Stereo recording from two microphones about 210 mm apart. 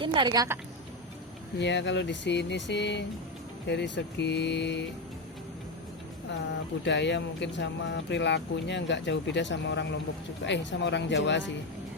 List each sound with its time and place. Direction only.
0.0 s a woman's voice: 25° right (ahead or behind)
1.5 s speech: 55° left (ahead or behind)
6.8 s speech: 60° left (ahead or behind)